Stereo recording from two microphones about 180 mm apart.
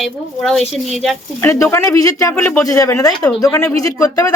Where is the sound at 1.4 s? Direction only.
15° left (ahead or behind).